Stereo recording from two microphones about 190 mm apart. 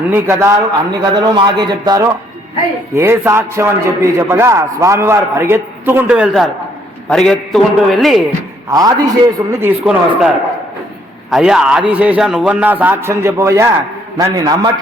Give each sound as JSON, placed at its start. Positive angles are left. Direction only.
{"t": 0.1, "sound": "a man's voice", "side_deg": -15}
{"t": 8.7, "sound": "a man's voice", "side_deg": -20}